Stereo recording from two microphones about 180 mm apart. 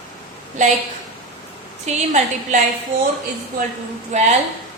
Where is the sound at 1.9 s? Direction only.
40° right (ahead or behind).